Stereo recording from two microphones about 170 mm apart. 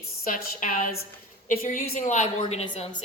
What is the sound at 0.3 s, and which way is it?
A woman's voice, 50° left (ahead or behind).